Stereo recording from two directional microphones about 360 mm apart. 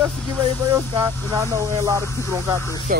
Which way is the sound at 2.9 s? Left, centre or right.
Right.